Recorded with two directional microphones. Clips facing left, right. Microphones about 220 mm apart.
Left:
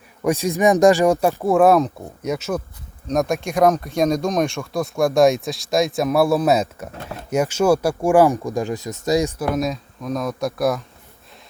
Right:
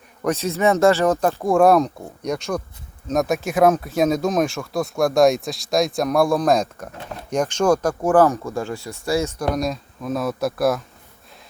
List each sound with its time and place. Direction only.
0.2 s speech: 10° left (ahead or behind)
9.4 s speech: centre (ahead or behind)